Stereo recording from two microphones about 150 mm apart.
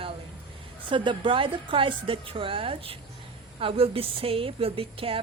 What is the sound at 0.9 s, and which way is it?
Speech, 35° right (ahead or behind).